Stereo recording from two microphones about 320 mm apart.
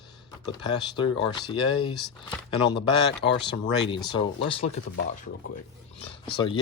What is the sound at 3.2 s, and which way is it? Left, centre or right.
Speech, left.